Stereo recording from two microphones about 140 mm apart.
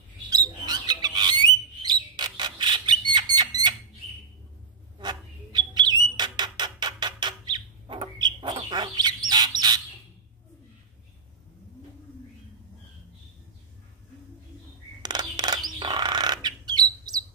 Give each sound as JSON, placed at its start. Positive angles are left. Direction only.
{"t": 0.3, "sound": "bird", "side_deg": -30}
{"t": 4.9, "sound": "bird", "side_deg": -30}
{"t": 15.0, "sound": "bird", "side_deg": -30}